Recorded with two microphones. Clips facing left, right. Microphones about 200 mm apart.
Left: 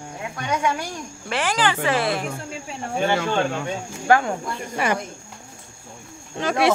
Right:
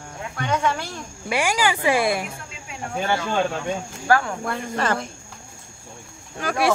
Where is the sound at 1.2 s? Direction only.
10° right (ahead or behind).